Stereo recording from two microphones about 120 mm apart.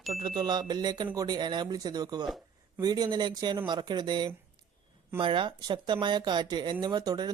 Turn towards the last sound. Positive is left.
turn(degrees=-35)  # may be behind; listen again after turning